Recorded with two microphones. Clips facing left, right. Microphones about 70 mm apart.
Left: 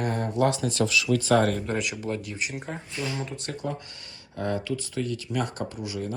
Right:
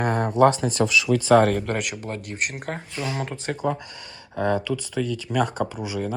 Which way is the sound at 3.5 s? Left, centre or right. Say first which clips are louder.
Right 6 dB; right.